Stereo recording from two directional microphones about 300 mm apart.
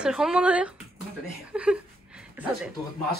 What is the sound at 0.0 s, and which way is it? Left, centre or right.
Speech, centre.